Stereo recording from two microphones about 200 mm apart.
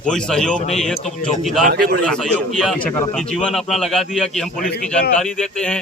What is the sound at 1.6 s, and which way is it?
Speech, 50° right (ahead or behind).